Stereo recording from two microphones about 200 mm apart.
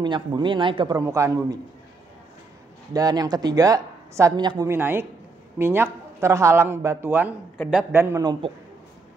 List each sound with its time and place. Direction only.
0.0 s a man's voice: 20° right (ahead or behind)
2.9 s a woman's voice: 20° right (ahead or behind)
7.5 s a woman's voice: 5° left (ahead or behind)
7.9 s a woman's voice: 10° right (ahead or behind)